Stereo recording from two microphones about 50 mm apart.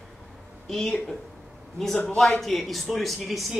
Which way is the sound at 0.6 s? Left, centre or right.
Centre.